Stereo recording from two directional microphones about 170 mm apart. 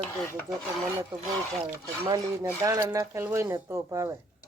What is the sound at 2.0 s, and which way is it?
Speech, 20° right (ahead or behind).